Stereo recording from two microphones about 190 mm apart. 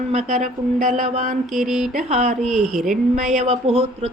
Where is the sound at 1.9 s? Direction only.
35° right (ahead or behind).